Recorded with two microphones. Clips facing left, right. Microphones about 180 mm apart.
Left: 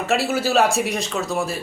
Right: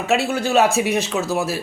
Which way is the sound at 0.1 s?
5° left (ahead or behind).